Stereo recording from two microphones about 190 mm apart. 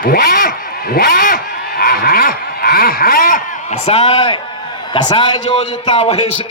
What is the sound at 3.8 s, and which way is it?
A man's voice, 30° left (ahead or behind).